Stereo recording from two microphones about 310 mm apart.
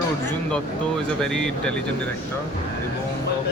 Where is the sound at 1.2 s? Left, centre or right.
Centre.